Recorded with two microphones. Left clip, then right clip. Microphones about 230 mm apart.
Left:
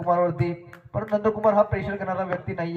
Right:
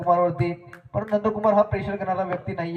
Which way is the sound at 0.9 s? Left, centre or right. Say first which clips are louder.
Even; right.